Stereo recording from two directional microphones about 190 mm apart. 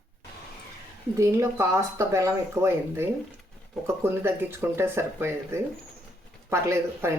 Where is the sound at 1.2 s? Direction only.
15° right (ahead or behind).